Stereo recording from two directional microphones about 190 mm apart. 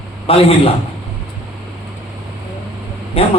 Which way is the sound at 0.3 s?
30° left (ahead or behind).